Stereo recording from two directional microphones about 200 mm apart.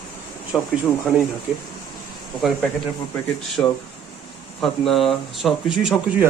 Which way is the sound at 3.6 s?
10° left (ahead or behind).